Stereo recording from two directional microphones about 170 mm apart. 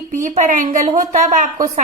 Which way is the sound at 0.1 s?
50° right (ahead or behind).